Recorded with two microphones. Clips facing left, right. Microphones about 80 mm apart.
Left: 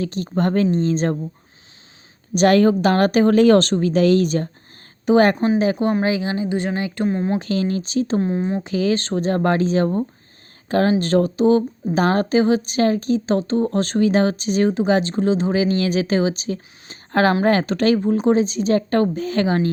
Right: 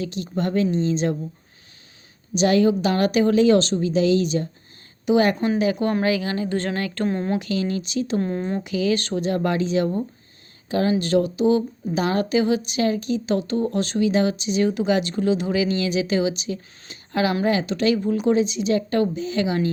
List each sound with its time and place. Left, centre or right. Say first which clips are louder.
0.0 s speech: left 4 dB; left
2.3 s speech: left 4 dB; left
5.4 s a woman's voice: left 3 dB; left; by 7.3 s centre
7.3 s a woman's voice: left 3 dB; left
8.2 s speech: left 3 dB; centre
8.6 s a woman's voice: left 2 dB; left